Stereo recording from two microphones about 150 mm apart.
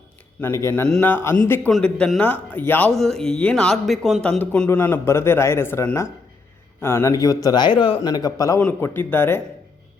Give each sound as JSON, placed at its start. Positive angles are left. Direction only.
{"t": 0.4, "sound": "speech", "side_deg": 20}
{"t": 1.7, "sound": "speech", "side_deg": 5}